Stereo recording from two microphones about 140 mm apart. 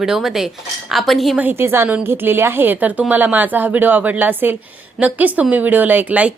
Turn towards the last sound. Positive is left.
turn(degrees=-10)  # may be behind; listen again after turning